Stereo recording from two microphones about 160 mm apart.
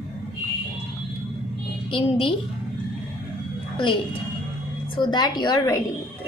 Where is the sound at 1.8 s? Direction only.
35° left (ahead or behind).